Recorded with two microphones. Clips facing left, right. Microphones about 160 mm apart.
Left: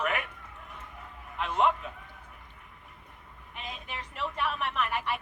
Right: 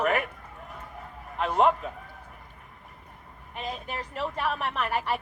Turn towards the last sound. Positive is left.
turn(degrees=-40)  # may be behind; listen again after turning